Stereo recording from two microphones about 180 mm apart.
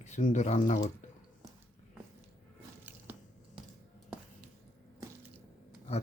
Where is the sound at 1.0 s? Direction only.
40° left (ahead or behind).